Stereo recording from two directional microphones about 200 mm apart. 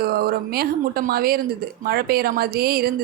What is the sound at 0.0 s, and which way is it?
Speech, 50° right (ahead or behind).